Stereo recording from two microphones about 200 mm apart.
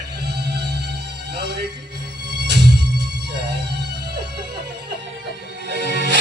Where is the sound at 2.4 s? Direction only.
55° right (ahead or behind).